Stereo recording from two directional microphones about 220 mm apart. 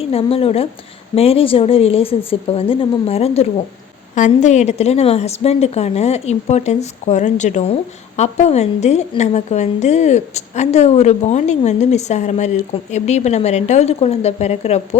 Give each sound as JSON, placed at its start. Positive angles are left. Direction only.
{"t": 0.0, "sound": "a woman's voice", "side_deg": 25}